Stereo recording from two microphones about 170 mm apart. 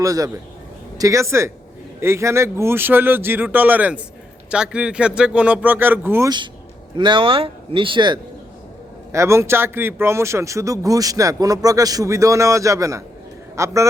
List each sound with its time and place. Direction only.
0.0 s a man's voice: 20° right (ahead or behind)
6.9 s a man's voice: 30° right (ahead or behind)
9.1 s speech: 15° right (ahead or behind)